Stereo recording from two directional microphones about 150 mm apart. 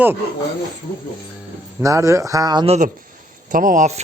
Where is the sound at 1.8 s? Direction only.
20° right (ahead or behind).